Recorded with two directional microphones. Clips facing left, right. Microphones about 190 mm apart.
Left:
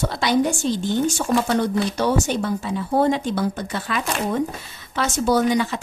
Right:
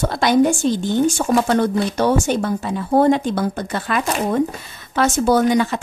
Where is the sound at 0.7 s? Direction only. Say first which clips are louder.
Right 4 dB; 50° right (ahead or behind).